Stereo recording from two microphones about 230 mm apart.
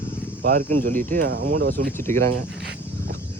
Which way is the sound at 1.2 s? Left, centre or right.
Right.